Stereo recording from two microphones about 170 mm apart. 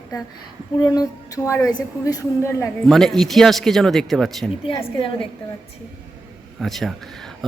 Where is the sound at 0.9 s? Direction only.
20° left (ahead or behind).